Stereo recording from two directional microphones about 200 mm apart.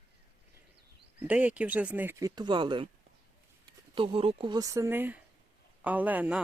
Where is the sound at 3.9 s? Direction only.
25° right (ahead or behind); by 6.4 s 10° right (ahead or behind).